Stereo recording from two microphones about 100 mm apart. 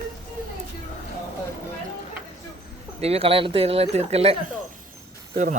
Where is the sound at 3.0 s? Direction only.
90° right.